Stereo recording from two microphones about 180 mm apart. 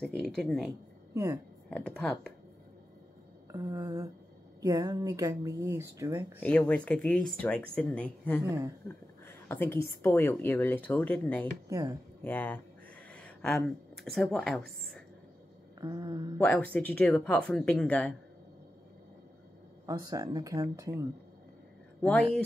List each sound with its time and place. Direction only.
0.0 s speech: centre (ahead or behind)
1.1 s speech: 15° right (ahead or behind)
1.7 s speech: 5° left (ahead or behind)
3.5 s speech: 20° right (ahead or behind)
6.4 s a woman's voice: 5° left (ahead or behind)
8.5 s speech: 15° right (ahead or behind)
8.8 s a woman's voice: 10° left (ahead or behind)
11.7 s speech: 20° right (ahead or behind)
12.2 s a woman's voice: 10° left (ahead or behind)
15.8 s speech: 25° right (ahead or behind)
16.3 s a woman's voice: 10° left (ahead or behind)
19.9 s speech: 20° right (ahead or behind)
22.0 s a woman's voice: 10° left (ahead or behind)